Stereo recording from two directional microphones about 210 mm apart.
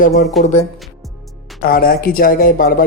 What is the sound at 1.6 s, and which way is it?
Speech, 45° left (ahead or behind).